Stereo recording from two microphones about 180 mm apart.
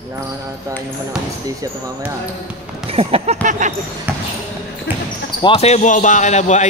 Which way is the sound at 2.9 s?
35° right (ahead or behind).